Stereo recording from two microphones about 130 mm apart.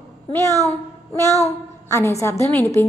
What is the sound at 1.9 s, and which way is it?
Speech, 25° left (ahead or behind).